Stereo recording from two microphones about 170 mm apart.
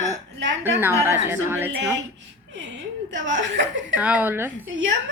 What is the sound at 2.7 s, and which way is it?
Speech, 90° right.